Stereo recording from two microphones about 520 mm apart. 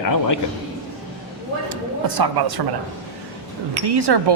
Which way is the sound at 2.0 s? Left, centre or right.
Right.